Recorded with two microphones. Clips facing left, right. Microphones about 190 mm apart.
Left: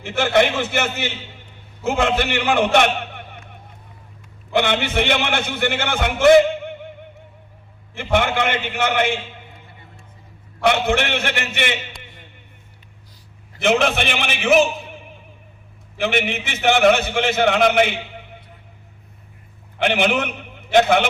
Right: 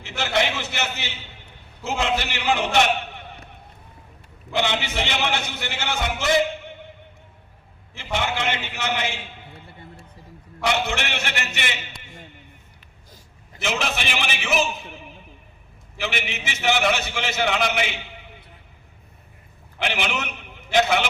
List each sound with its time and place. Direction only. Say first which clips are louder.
0.2 s a man's voice: left 7 dB; 55° left (ahead or behind)
4.5 s a man's voice: left 5 dB; 55° left (ahead or behind)
7.9 s a man's voice: left 7 dB; 55° left (ahead or behind)
10.6 s a man's voice: left 6 dB; 55° left (ahead or behind)
13.6 s a man's voice: left 9 dB; 55° left (ahead or behind)
19.8 s a man's voice: left 8 dB; 55° left (ahead or behind)